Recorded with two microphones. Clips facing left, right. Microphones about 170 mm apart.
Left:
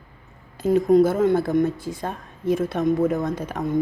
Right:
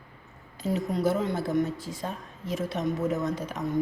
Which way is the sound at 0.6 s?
50° left (ahead or behind).